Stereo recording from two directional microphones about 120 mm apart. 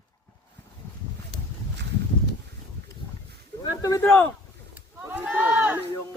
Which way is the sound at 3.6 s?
30° left (ahead or behind).